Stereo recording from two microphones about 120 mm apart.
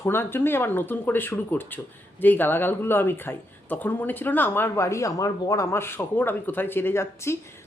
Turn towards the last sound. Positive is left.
turn(degrees=20)  # may be behind; listen again after turning